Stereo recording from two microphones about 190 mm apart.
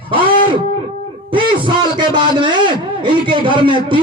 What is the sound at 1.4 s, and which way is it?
A man's voice, 25° right (ahead or behind).